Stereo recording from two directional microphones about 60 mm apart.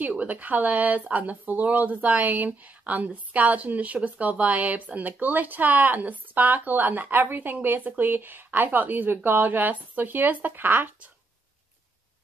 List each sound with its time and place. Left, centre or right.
0.0 s speech: right